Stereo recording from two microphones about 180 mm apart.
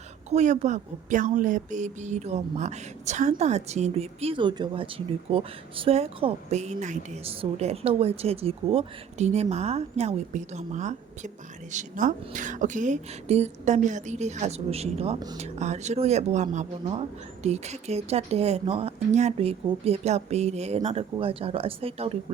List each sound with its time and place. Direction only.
0.3 s a woman's voice: 40° right (ahead or behind)